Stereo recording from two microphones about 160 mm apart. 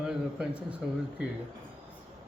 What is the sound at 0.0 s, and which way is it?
Speech, 5° right (ahead or behind).